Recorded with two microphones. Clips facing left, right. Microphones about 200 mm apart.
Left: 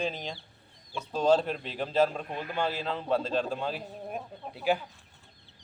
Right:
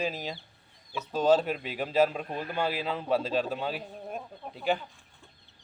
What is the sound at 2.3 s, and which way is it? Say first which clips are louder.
Speech: right 1 dB; 35° right (ahead or behind).